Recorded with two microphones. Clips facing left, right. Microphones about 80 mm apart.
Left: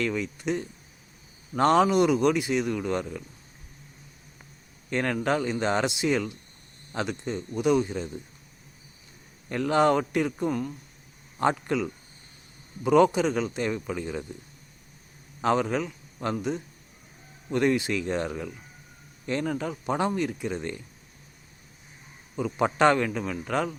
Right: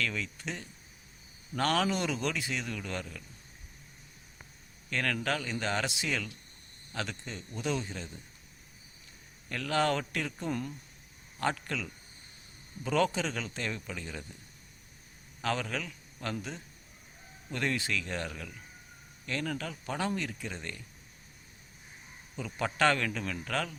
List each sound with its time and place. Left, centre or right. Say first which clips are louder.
0.0 s speech: left 7 dB; centre
4.9 s a man's voice: left 6 dB; left
9.5 s a man's voice: left 7 dB; left
15.4 s a man's voice: left 9 dB; left
22.4 s speech: left 7 dB; left